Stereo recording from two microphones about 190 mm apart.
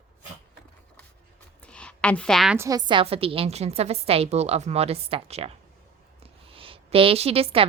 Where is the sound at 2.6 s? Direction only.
20° right (ahead or behind).